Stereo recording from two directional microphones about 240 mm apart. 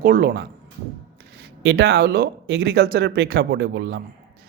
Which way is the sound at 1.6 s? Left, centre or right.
Right.